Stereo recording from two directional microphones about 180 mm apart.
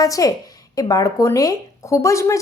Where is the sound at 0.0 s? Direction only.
20° left (ahead or behind).